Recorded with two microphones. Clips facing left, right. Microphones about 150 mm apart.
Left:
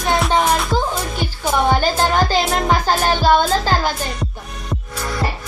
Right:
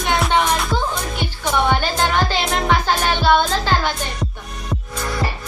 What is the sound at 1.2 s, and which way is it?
Music, 40° left (ahead or behind).